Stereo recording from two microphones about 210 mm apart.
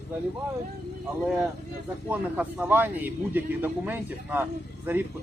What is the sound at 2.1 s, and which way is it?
Speech, 10° right (ahead or behind).